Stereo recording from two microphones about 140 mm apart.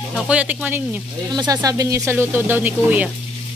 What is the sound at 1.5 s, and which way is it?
Speech, 25° right (ahead or behind).